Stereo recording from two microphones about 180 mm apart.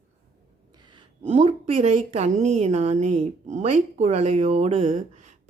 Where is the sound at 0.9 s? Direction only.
35° right (ahead or behind).